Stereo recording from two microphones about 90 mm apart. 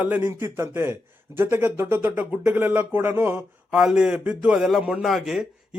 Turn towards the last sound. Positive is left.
turn(degrees=0)  # may be behind; listen again after turning